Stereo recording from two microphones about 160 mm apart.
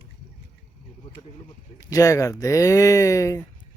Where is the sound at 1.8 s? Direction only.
20° left (ahead or behind).